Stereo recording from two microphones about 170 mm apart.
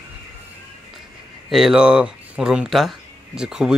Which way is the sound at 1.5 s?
5° right (ahead or behind).